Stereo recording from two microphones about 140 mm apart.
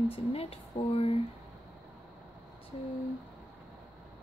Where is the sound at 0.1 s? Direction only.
45° left (ahead or behind).